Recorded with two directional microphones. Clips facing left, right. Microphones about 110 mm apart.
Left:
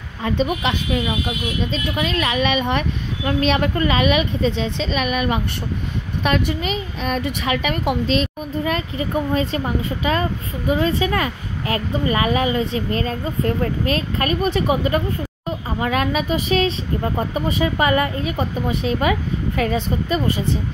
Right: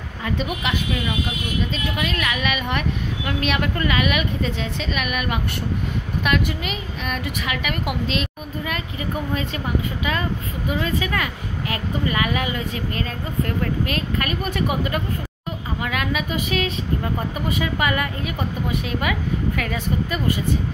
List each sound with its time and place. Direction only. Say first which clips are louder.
0.2 s a woman's voice: left 5 dB; 30° left (ahead or behind)